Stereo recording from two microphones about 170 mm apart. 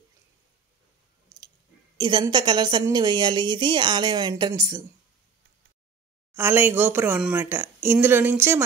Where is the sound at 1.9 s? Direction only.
25° right (ahead or behind).